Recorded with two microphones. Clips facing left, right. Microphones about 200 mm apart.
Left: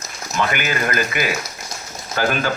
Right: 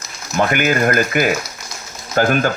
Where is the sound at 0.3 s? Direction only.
45° right (ahead or behind).